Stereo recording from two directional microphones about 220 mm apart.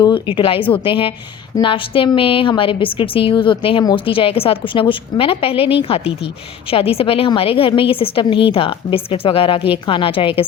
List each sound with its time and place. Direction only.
0.0 s a woman's voice: 20° left (ahead or behind)